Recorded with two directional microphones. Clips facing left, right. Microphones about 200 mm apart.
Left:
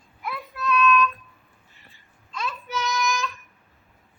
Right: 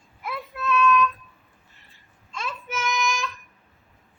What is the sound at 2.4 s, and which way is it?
Child singing, 25° right (ahead or behind).